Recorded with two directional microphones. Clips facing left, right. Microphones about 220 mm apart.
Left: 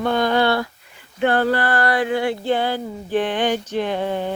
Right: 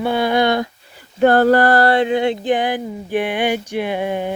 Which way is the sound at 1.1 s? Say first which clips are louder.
Right 6 dB; 40° right (ahead or behind).